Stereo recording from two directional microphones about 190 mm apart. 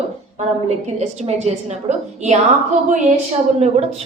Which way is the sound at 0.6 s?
35° right (ahead or behind).